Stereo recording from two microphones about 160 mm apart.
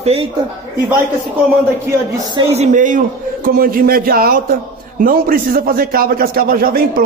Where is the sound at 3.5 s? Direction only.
65° right (ahead or behind).